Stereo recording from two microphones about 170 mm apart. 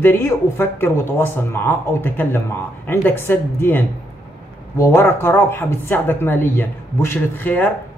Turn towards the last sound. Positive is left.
turn(degrees=10)  # may be behind; listen again after turning